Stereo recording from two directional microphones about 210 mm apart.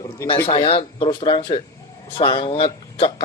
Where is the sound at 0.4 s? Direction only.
25° left (ahead or behind).